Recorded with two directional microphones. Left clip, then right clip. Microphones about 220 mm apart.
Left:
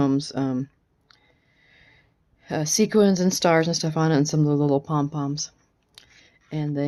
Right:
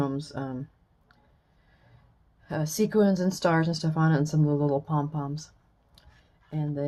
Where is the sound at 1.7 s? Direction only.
50° left (ahead or behind).